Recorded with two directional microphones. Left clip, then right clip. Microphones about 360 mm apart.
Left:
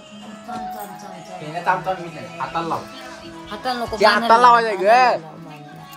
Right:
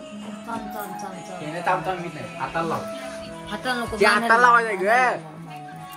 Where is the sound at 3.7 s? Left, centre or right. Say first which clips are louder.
Left 3 dB; centre.